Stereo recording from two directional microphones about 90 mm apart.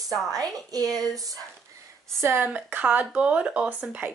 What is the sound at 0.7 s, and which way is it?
Speech, 40° right (ahead or behind).